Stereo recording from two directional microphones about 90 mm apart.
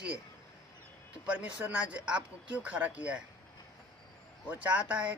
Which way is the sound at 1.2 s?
15° right (ahead or behind).